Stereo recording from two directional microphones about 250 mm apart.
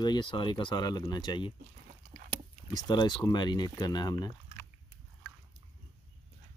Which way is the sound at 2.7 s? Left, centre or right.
Centre.